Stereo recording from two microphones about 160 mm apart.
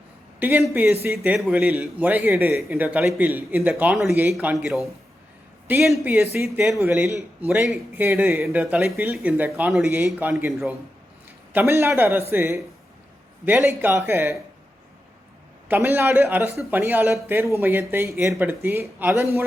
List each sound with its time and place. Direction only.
0.3 s speech: 10° right (ahead or behind)
4.5 s speech: centre (ahead or behind)
5.8 s speech: 5° right (ahead or behind)
6.3 s speech: 15° right (ahead or behind)
11.5 s speech: 15° right (ahead or behind)
15.7 s speech: 10° right (ahead or behind)